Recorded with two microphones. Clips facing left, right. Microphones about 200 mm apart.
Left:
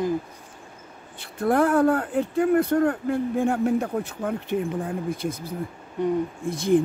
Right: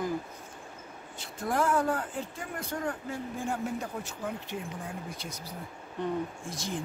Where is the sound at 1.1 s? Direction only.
60° left (ahead or behind).